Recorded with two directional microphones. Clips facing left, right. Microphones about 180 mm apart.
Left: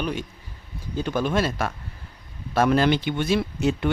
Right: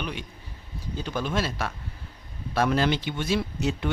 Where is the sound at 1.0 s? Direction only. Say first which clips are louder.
Left 5 dB; 55° left (ahead or behind).